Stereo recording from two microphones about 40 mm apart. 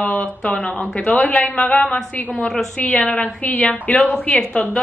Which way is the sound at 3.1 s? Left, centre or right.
Left.